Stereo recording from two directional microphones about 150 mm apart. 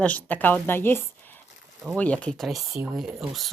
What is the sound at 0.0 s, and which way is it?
Speech, 10° left (ahead or behind).